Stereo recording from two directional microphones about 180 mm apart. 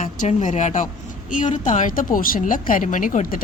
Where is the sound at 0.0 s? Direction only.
40° left (ahead or behind).